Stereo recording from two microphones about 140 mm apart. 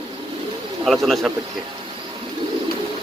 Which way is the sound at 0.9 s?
Centre (ahead or behind).